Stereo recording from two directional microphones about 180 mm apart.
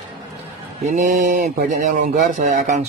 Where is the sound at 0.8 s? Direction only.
45° right (ahead or behind).